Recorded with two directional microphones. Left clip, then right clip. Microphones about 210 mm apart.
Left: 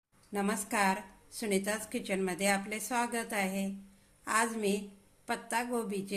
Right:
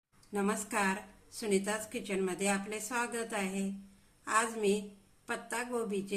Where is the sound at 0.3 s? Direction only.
15° left (ahead or behind).